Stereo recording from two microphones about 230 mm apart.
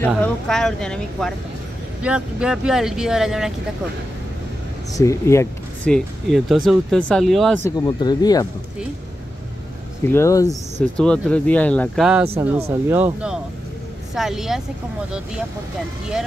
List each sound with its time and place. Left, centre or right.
0.0 s speech: centre
4.9 s speech: centre
7.7 s speech: centre
10.0 s speech: centre
11.0 s speech: centre